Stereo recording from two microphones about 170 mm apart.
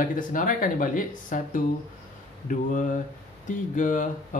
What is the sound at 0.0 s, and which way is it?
Speech, 50° left (ahead or behind).